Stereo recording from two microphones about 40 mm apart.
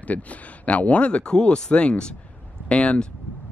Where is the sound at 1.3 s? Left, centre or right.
Centre.